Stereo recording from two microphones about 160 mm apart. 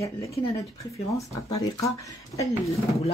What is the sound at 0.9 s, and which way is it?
Speech, 40° left (ahead or behind).